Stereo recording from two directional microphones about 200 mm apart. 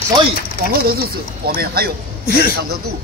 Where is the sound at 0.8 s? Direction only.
50° right (ahead or behind).